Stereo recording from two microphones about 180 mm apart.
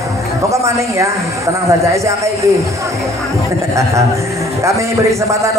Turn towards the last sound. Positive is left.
turn(degrees=-15)  # may be behind; listen again after turning